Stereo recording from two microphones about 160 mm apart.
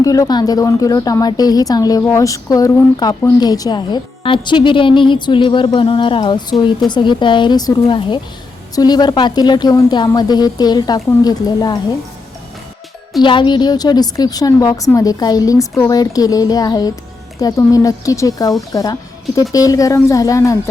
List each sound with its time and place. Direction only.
0.0 s speech: 20° left (ahead or behind)
13.2 s speech: 30° left (ahead or behind)